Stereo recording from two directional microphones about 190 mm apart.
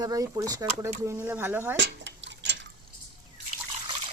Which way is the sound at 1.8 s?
70° right (ahead or behind).